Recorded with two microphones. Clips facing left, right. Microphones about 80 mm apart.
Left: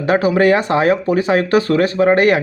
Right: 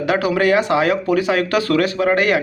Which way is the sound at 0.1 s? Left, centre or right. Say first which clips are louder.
Left 4 dB; left.